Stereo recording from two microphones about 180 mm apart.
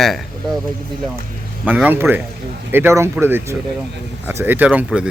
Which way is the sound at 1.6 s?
10° right (ahead or behind).